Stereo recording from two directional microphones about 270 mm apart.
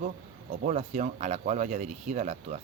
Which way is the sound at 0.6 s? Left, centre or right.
Right.